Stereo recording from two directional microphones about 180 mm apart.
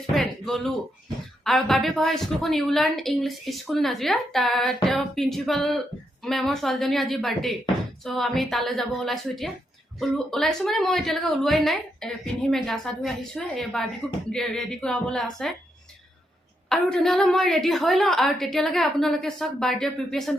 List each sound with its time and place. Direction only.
0.1 s a woman's voice: centre (ahead or behind)
16.6 s a woman's voice: centre (ahead or behind)